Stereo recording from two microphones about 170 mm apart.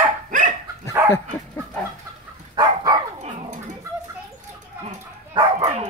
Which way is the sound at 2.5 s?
25° right (ahead or behind).